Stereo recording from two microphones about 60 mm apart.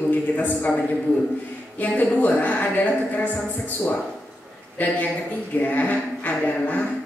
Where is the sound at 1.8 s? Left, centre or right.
Left.